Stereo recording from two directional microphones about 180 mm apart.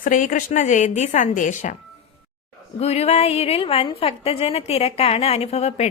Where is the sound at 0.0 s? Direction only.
45° left (ahead or behind).